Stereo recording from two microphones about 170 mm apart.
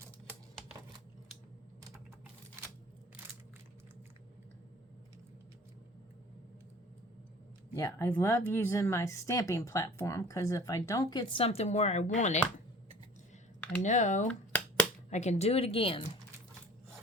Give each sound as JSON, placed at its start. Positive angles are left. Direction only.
{"t": 7.8, "sound": "speech", "side_deg": 20}
{"t": 11.4, "sound": "speech", "side_deg": 40}
{"t": 13.8, "sound": "speech", "side_deg": 45}
{"t": 14.3, "sound": "finger snapping", "side_deg": 5}
{"t": 15.1, "sound": "speech", "side_deg": 40}